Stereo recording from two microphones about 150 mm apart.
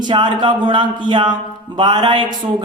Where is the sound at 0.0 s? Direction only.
30° right (ahead or behind).